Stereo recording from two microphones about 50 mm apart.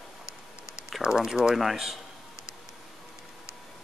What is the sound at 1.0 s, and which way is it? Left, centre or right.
Speech, centre.